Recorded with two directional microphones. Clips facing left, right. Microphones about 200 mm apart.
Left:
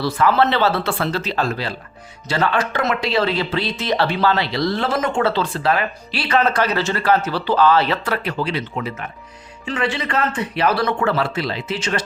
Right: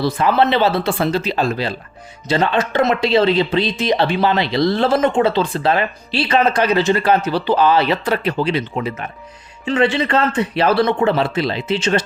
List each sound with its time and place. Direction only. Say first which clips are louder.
0.0 s speech: right 1 dB; 20° right (ahead or behind)